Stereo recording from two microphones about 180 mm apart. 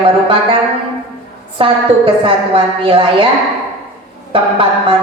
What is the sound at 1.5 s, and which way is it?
A woman's voice, 30° right (ahead or behind).